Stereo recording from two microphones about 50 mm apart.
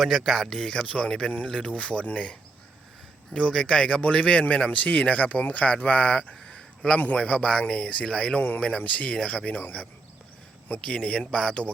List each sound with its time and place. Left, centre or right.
0.0 s speech: centre
0.9 s speech: centre
3.3 s speech: centre
8.4 s speech: left; by 11.7 s centre